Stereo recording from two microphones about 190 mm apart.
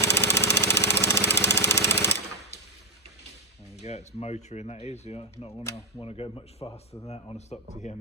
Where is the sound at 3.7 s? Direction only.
35° left (ahead or behind).